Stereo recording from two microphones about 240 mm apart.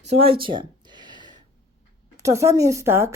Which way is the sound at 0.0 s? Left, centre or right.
Right.